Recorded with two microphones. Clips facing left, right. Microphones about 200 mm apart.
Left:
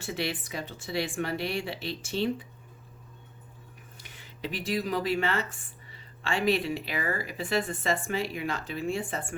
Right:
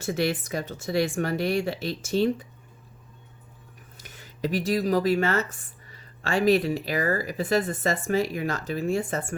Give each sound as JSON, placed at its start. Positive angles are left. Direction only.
{"t": 0.0, "sound": "speech", "side_deg": -45}
{"t": 3.9, "sound": "speech", "side_deg": -45}